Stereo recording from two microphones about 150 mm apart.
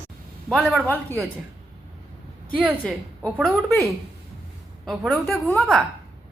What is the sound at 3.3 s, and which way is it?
Speech, 5° right (ahead or behind).